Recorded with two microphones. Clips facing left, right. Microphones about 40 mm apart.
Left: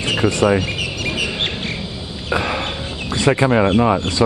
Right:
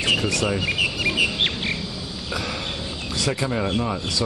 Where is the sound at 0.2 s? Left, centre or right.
Left.